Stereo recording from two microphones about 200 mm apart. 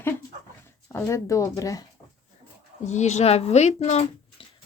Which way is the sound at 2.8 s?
35° left (ahead or behind).